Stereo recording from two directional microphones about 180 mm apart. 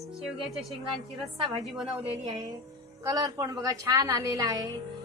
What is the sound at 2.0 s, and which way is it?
A woman's voice, 20° right (ahead or behind).